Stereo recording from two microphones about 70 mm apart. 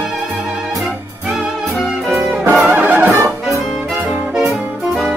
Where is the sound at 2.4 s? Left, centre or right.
Right.